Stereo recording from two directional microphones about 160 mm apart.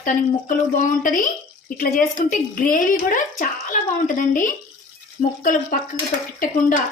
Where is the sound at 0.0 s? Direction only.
55° left (ahead or behind).